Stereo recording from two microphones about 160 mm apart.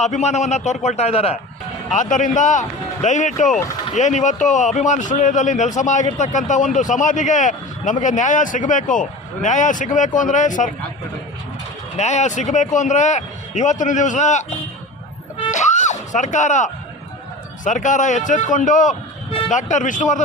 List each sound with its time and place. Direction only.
0.0 s a man's voice: 45° left (ahead or behind)
1.9 s a man's voice: 50° left (ahead or behind)
11.9 s a man's voice: 45° left (ahead or behind)
15.4 s screaming: 50° left (ahead or behind)
17.6 s a man's voice: 50° left (ahead or behind)